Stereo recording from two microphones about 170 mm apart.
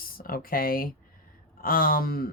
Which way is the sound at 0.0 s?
60° left (ahead or behind).